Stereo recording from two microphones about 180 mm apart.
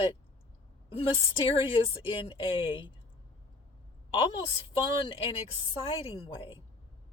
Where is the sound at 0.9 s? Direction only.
30° left (ahead or behind).